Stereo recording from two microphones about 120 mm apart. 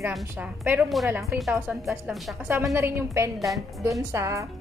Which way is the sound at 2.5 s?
25° right (ahead or behind).